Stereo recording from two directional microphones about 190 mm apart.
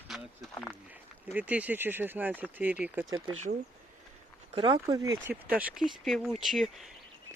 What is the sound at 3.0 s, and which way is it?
Speech, 25° right (ahead or behind).